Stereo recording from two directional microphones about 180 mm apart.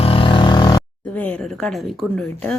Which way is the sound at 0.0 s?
30° left (ahead or behind).